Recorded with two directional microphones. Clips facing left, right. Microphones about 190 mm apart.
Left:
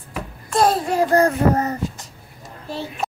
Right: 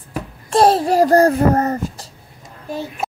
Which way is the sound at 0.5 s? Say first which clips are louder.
Right 5 dB; 30° right (ahead or behind).